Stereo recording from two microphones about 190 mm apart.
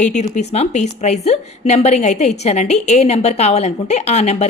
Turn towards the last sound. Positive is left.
turn(degrees=35)  # may be behind; listen again after turning